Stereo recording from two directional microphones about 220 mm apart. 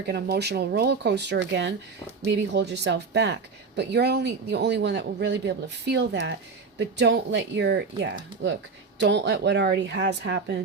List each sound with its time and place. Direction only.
0.1 s speech: 50° right (ahead or behind)